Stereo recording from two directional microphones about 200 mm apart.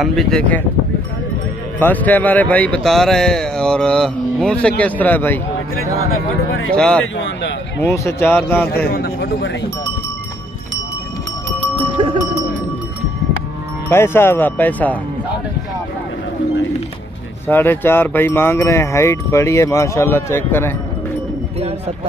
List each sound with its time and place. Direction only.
0.0 s speech: centre (ahead or behind)
1.8 s speech: 10° left (ahead or behind)
5.8 s speech: 90° left
6.8 s speech: 5° left (ahead or behind)
8.9 s a man's voice: 55° left (ahead or behind)
11.4 s a sound: 5° left (ahead or behind)
13.8 s speech: 10° left (ahead or behind)
17.5 s speech: 10° left (ahead or behind)
21.5 s bird: 30° right (ahead or behind)